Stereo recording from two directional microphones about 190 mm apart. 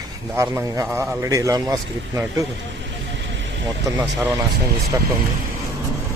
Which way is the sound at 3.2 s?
70° right (ahead or behind).